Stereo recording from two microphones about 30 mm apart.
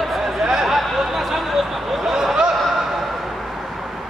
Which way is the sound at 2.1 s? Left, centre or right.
Centre.